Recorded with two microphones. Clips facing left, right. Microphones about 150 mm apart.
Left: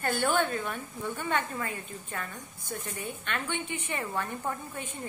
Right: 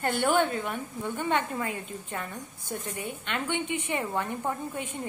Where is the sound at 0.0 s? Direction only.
20° right (ahead or behind).